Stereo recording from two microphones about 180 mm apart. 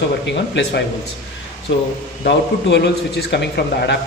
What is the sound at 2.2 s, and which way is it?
Speech, 70° left (ahead or behind).